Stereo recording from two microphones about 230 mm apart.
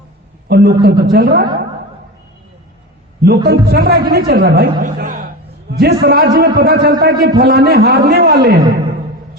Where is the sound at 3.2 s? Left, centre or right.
Right.